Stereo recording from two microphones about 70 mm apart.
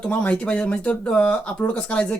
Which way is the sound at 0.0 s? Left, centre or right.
Centre.